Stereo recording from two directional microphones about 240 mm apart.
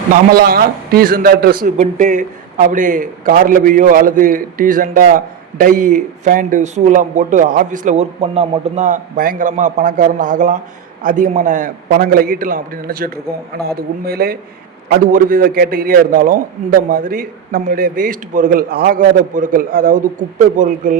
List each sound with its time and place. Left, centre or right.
0.1 s a man's voice: right